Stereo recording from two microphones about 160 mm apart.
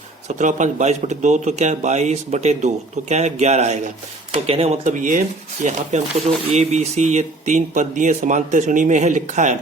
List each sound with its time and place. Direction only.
0.3 s speech: 50° right (ahead or behind)
6.5 s speech: 40° right (ahead or behind)